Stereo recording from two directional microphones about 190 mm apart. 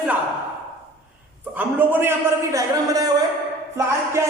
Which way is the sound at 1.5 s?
10° right (ahead or behind).